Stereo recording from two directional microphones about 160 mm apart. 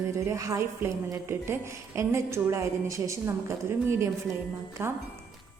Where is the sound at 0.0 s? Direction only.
20° right (ahead or behind).